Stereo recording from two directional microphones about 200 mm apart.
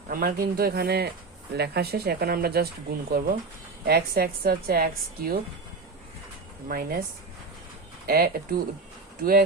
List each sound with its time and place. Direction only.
0.1 s speech: 45° right (ahead or behind)
6.7 s speech: 50° right (ahead or behind)
8.0 s speech: 50° right (ahead or behind)